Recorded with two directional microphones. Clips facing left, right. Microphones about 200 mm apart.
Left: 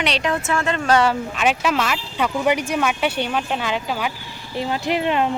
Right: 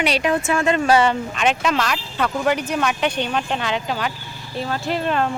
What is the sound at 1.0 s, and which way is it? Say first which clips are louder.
Speech: even; 5° left (ahead or behind).